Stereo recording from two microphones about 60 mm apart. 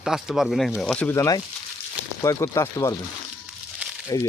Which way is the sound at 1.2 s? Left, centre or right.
Left.